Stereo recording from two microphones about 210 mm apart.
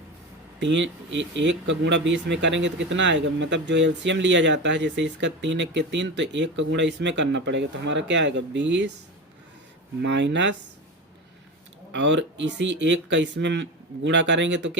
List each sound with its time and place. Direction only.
0.6 s speech: 60° right (ahead or behind)
10.0 s speech: 60° right (ahead or behind)
11.9 s speech: 60° right (ahead or behind)